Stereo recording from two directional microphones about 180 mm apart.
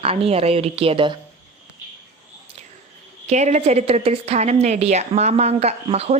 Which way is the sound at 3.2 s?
40° right (ahead or behind).